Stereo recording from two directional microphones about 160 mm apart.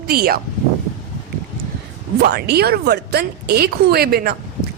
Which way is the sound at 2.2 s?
85° right.